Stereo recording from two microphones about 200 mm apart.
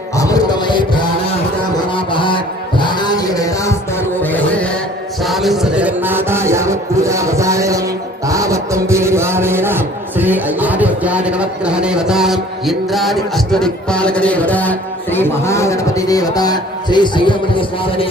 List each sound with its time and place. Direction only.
0.2 s a sound: 20° left (ahead or behind)
5.2 s music: centre (ahead or behind)
8.3 s a man's voice: 15° right (ahead or behind); by 18.1 s 25° left (ahead or behind)